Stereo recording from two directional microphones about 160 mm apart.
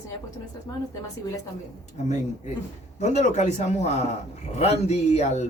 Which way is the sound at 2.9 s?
45° left (ahead or behind).